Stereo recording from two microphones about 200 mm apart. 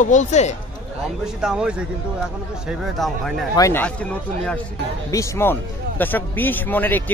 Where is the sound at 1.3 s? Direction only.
5° right (ahead or behind).